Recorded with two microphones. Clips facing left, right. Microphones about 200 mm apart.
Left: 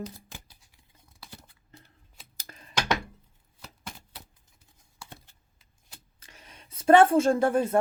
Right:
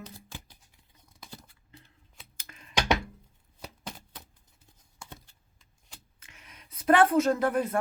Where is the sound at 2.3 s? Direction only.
35° left (ahead or behind).